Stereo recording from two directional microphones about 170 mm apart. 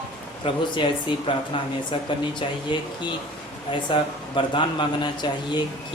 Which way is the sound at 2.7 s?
30° left (ahead or behind).